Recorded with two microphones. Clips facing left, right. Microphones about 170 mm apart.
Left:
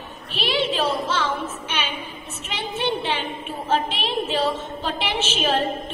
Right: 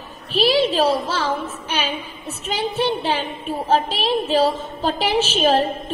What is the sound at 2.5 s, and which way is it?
A child's voice, 40° right (ahead or behind).